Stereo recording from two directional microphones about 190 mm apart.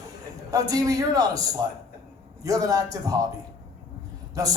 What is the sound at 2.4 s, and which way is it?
Speech, 20° right (ahead or behind).